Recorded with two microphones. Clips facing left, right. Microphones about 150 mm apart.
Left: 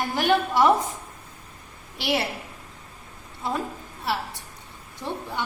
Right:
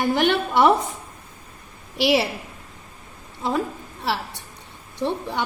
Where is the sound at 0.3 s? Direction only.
70° right (ahead or behind).